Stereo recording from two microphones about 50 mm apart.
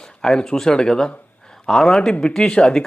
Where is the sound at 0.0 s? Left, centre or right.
Centre.